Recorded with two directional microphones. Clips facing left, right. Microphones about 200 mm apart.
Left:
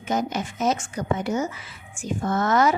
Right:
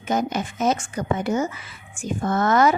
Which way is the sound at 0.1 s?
55° right (ahead or behind).